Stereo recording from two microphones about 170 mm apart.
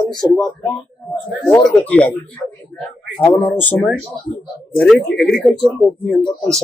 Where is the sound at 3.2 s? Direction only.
10° left (ahead or behind).